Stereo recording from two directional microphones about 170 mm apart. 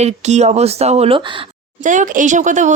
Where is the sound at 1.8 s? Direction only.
50° right (ahead or behind).